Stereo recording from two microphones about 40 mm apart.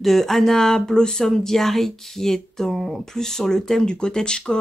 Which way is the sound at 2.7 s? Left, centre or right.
Centre.